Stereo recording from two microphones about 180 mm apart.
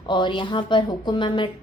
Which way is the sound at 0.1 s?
25° left (ahead or behind).